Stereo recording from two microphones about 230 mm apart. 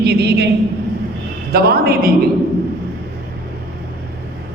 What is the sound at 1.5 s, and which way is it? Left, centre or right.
Speech, right.